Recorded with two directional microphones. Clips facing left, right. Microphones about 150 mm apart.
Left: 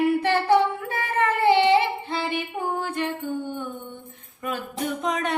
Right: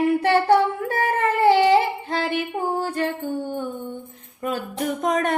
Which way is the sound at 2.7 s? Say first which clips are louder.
Right 1 dB; 35° right (ahead or behind).